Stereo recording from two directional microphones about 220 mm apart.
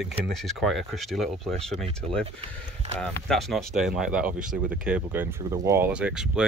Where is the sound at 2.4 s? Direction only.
30° right (ahead or behind).